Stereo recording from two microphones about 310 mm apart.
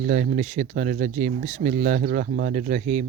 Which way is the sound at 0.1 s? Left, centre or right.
Right.